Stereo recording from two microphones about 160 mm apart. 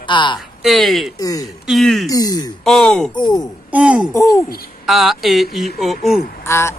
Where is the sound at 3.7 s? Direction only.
5° right (ahead or behind).